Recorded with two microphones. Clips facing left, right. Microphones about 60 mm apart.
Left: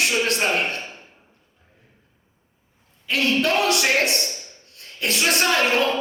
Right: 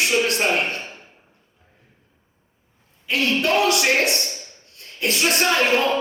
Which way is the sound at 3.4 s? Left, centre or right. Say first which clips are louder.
Right 1 dB; left.